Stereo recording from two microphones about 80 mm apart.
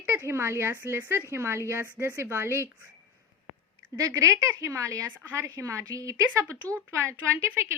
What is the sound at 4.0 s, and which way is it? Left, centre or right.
Speech, right.